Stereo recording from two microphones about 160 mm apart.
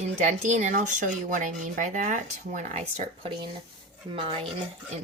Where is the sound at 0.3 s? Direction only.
50° right (ahead or behind).